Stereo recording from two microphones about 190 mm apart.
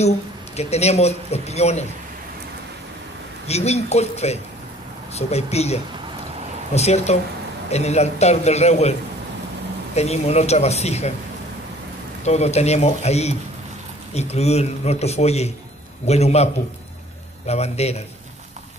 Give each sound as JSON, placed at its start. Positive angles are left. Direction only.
{"t": 0.6, "sound": "speech", "side_deg": 35}
{"t": 3.4, "sound": "speech", "side_deg": 35}
{"t": 9.9, "sound": "speech", "side_deg": 35}
{"t": 12.3, "sound": "speech", "side_deg": 35}
{"t": 17.5, "sound": "speech", "side_deg": 35}